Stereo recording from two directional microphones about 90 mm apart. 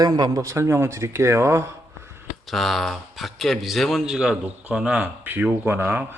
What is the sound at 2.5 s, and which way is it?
A man's voice, centre (ahead or behind).